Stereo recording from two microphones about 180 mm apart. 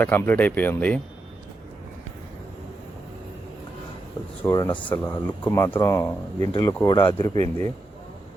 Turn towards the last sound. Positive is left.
turn(degrees=20)  # may be behind; listen again after turning